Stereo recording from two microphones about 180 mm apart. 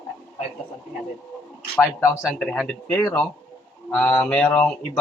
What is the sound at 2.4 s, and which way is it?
Speech, 5° left (ahead or behind).